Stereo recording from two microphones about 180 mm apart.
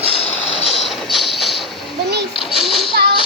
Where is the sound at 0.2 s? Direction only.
35° left (ahead or behind).